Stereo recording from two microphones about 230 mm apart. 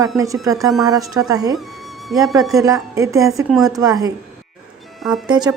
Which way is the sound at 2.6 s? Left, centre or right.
Centre.